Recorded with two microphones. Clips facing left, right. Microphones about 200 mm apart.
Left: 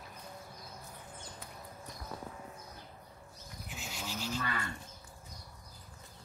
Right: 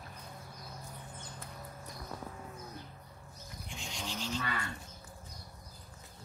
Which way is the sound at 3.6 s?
5° left (ahead or behind).